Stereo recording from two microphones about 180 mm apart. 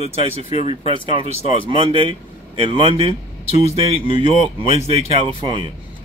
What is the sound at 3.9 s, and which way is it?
Speech, 30° right (ahead or behind).